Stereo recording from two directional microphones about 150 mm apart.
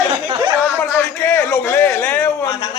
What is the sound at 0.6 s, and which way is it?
A man's voice, 15° left (ahead or behind).